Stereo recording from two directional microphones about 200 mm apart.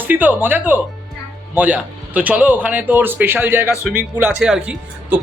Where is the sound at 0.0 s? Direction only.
10° right (ahead or behind).